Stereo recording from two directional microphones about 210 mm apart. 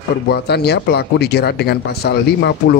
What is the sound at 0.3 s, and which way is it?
Speech, 50° left (ahead or behind).